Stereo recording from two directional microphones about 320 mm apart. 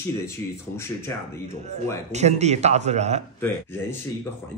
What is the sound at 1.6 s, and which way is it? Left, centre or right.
Speech, right.